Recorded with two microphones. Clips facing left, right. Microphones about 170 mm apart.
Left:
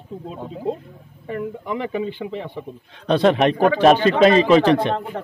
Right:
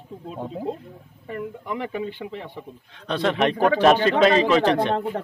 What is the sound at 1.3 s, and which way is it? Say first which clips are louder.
Speech: left 4 dB; centre (ahead or behind).